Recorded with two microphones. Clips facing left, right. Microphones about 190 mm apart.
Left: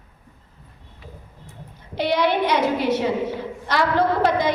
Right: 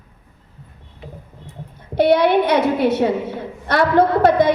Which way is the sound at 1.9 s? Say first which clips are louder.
Right 7 dB; 55° right (ahead or behind).